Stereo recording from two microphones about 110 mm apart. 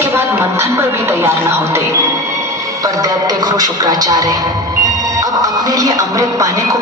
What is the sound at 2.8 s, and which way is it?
Music, 35° right (ahead or behind).